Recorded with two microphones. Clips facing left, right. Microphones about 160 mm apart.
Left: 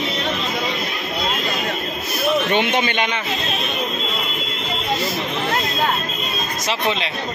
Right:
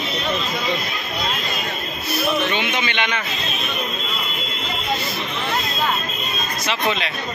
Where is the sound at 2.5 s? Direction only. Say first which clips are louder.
Left 4 dB; 50° left (ahead or behind).